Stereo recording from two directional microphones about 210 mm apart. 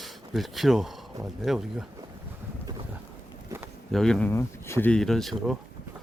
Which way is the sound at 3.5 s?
15° right (ahead or behind).